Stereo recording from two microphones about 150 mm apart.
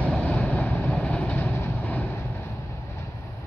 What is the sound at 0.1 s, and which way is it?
Vehicle, 5° left (ahead or behind).